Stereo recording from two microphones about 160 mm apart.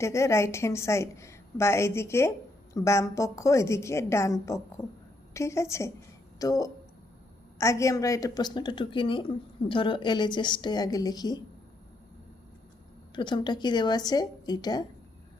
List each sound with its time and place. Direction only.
0.0 s a woman's voice: 20° left (ahead or behind)
13.1 s a woman's voice: 30° left (ahead or behind)